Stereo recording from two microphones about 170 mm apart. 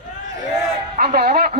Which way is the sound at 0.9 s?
65° right (ahead or behind).